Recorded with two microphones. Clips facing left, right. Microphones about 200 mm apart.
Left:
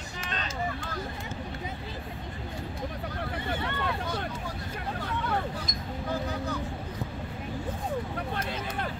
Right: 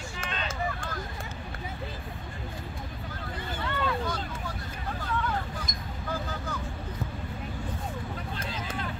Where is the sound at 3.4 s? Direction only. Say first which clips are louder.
Right 2 dB; 65° left (ahead or behind).